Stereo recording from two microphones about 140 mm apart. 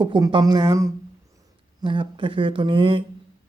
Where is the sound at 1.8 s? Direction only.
35° right (ahead or behind).